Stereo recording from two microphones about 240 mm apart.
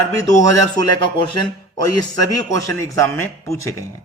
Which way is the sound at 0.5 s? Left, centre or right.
Centre.